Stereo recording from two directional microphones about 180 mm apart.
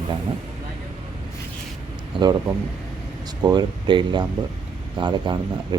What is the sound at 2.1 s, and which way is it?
Speech, 30° right (ahead or behind).